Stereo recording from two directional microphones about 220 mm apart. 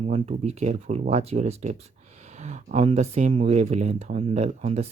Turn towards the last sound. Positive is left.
turn(degrees=-30)  # may be behind; listen again after turning